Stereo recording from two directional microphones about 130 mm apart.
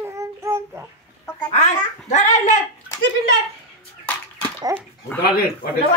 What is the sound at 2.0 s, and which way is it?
Speech, 65° left (ahead or behind).